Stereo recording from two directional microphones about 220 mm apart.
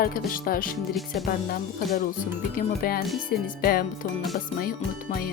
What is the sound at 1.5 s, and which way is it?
Speech, 40° left (ahead or behind).